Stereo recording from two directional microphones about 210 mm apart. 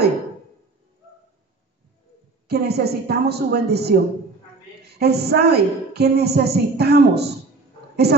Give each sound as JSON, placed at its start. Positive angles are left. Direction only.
{"t": 2.4, "sound": "a woman's voice", "side_deg": -50}